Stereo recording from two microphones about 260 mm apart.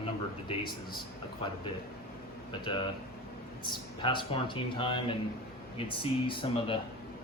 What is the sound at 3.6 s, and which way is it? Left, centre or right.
Speech, centre.